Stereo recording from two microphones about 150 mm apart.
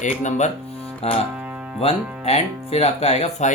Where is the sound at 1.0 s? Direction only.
45° left (ahead or behind).